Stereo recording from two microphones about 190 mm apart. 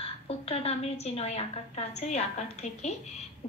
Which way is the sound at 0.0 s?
30° left (ahead or behind).